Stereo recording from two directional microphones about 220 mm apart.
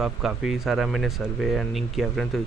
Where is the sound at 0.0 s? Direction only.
5° right (ahead or behind).